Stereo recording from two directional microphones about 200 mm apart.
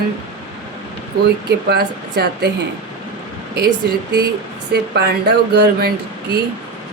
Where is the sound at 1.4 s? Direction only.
55° right (ahead or behind).